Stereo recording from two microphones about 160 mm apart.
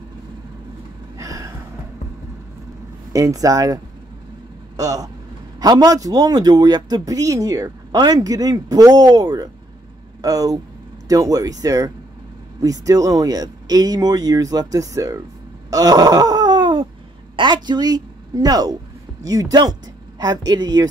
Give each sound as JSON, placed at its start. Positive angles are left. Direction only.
{"t": 1.1, "sound": "a sound", "side_deg": -20}
{"t": 3.1, "sound": "speech", "side_deg": -20}
{"t": 15.7, "sound": "groan", "side_deg": -25}
{"t": 17.4, "sound": "a woman's voice", "side_deg": -30}